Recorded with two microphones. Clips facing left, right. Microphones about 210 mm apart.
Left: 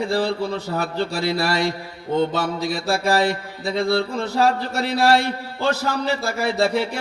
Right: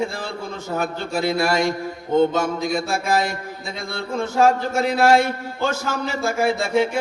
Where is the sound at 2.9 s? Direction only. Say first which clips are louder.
Left 2 dB; 35° left (ahead or behind).